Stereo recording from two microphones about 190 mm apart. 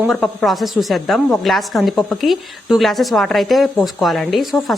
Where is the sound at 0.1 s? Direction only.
5° left (ahead or behind).